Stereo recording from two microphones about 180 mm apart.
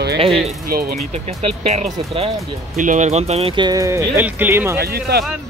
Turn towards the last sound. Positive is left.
turn(degrees=-60)  # may be behind; listen again after turning